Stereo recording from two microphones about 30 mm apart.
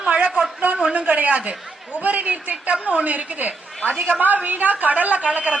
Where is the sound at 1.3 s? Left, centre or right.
Right.